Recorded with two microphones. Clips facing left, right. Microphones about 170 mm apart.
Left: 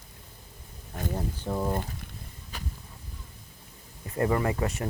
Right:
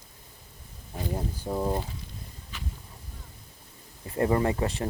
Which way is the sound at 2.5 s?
40° left (ahead or behind).